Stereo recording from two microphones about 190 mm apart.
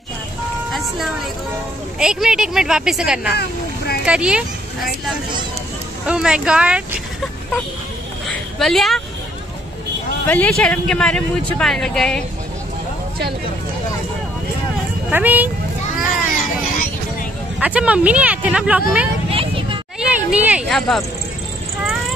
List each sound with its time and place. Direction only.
0.7 s ice cream truck: centre (ahead or behind)
2.0 s speech: 5° right (ahead or behind)
3.3 s boat: 55° left (ahead or behind)
4.0 s speech: 5° right (ahead or behind)
6.0 s speech: 5° right (ahead or behind)
8.5 s speech: centre (ahead or behind)
10.2 s speech: 10° left (ahead or behind)
15.0 s speech: 10° right (ahead or behind)
17.6 s speech: 5° right (ahead or behind)
19.3 s vehicle: 30° right (ahead or behind)
20.0 s a sound: 5° right (ahead or behind)
20.6 s speech: centre (ahead or behind)